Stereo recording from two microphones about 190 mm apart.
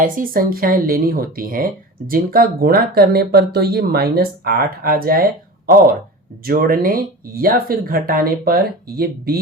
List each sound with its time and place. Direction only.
0.0 s speech: 45° right (ahead or behind)